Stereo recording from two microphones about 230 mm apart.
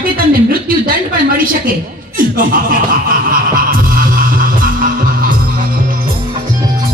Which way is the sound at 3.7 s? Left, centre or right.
Right.